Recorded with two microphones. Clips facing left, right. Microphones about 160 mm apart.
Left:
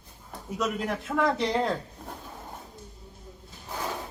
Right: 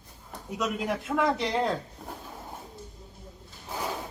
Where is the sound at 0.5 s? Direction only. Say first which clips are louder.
Even; centre (ahead or behind).